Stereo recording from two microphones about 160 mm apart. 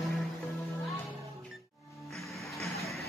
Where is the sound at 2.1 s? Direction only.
Centre (ahead or behind).